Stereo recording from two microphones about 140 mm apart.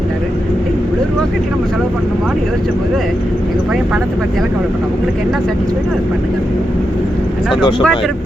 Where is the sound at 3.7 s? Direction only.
5° right (ahead or behind).